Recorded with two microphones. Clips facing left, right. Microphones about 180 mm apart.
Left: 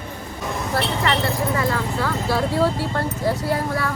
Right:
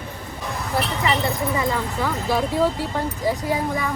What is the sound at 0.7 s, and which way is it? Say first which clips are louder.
Speech: even; 15° right (ahead or behind).